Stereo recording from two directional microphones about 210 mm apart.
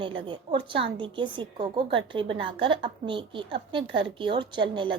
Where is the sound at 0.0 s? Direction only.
25° right (ahead or behind).